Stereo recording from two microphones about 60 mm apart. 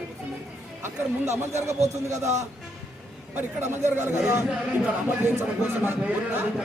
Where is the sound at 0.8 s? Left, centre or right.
Right.